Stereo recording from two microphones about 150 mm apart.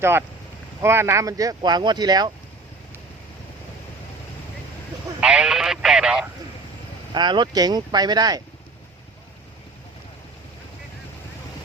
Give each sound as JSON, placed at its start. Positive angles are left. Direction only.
{"t": 0.0, "sound": "speech", "side_deg": -15}
{"t": 5.2, "sound": "radio", "side_deg": -5}
{"t": 7.1, "sound": "speech", "side_deg": -30}